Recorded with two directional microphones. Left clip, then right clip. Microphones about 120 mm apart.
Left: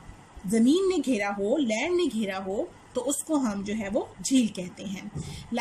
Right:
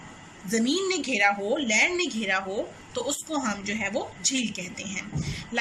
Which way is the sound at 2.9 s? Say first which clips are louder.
Left 2 dB; 65° left (ahead or behind).